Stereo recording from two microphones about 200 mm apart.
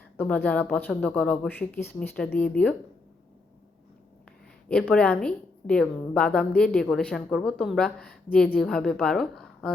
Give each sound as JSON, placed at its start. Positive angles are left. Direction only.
{"t": 0.2, "sound": "speech", "side_deg": 10}
{"t": 4.7, "sound": "a woman's voice", "side_deg": 5}